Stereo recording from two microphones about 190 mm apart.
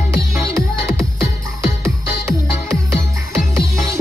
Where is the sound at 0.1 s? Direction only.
15° right (ahead or behind).